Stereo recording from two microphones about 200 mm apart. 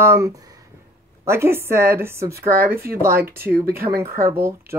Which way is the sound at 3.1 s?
45° right (ahead or behind).